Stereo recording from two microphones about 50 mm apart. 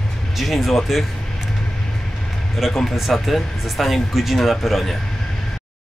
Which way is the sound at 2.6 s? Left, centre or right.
Centre.